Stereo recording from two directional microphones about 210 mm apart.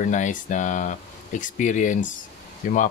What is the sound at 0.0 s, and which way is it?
Speech, 35° left (ahead or behind).